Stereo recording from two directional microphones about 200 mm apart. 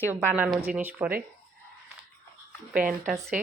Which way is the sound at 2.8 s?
10° right (ahead or behind).